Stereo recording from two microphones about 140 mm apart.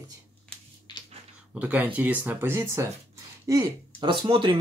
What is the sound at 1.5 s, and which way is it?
Speech, 10° right (ahead or behind).